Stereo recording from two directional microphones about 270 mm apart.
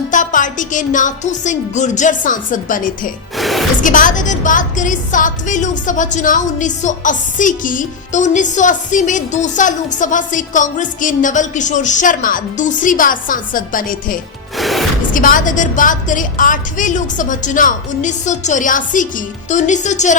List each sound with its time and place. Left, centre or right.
0.1 s a woman's voice: left
3.3 s music: centre
3.8 s a woman's voice: left
14.5 s music: centre
15.1 s a woman's voice: left